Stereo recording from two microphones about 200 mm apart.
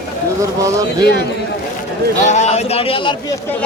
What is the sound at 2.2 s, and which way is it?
Speech, 35° left (ahead or behind).